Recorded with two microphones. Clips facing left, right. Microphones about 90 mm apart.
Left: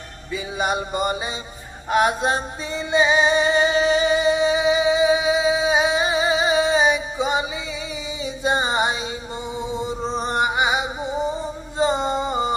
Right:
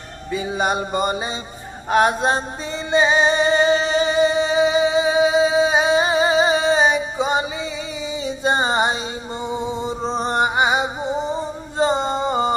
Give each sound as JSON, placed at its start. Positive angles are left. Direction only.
{"t": 0.3, "sound": "music", "side_deg": -35}
{"t": 10.2, "sound": "music", "side_deg": -35}